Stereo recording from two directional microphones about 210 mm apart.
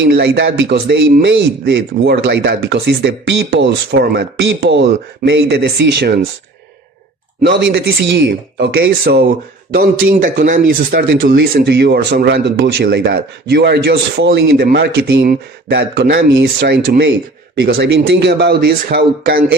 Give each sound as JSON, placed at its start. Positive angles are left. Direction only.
{"t": 0.0, "sound": "speech", "side_deg": -50}
{"t": 7.4, "sound": "speech", "side_deg": -55}